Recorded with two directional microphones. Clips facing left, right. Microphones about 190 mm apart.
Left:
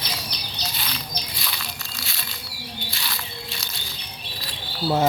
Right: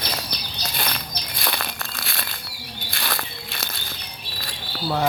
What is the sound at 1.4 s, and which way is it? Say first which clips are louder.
Crumpling: right 6 dB; 55° right (ahead or behind).